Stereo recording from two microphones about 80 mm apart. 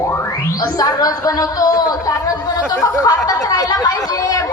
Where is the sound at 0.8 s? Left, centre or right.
Left.